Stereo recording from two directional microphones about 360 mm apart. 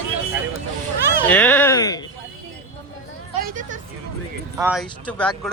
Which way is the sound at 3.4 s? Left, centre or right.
Right.